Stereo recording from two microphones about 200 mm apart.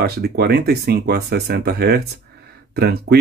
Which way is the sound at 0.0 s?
50° right (ahead or behind).